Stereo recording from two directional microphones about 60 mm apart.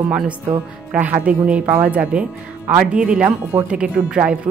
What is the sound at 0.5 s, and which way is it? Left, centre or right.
Speech, right.